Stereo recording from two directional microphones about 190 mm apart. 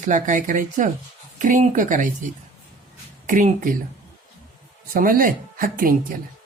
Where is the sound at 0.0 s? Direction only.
40° right (ahead or behind).